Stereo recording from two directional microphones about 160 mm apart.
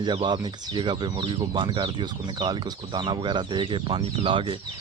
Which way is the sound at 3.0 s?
30° right (ahead or behind).